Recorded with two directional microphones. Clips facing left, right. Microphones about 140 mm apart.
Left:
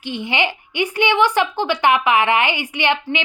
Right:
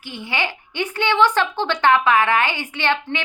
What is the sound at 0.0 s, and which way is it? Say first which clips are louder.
A woman's voice: left 4 dB; 20° left (ahead or behind).